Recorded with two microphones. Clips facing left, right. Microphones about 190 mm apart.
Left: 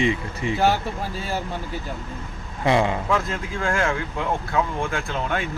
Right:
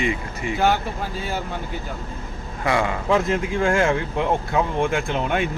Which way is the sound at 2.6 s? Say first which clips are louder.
Left 2 dB; 25° left (ahead or behind).